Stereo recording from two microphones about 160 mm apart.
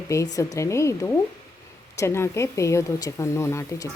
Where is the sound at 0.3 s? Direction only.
20° left (ahead or behind).